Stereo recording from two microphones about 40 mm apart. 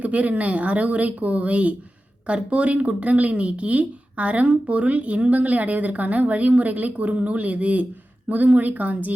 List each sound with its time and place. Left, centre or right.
0.0 s speech: right